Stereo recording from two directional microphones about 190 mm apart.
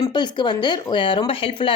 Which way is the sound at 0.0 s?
25° left (ahead or behind).